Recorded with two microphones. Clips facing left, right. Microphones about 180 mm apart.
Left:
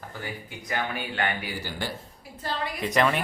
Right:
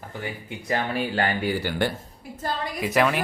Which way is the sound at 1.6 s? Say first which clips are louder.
Right 8 dB; 65° right (ahead or behind).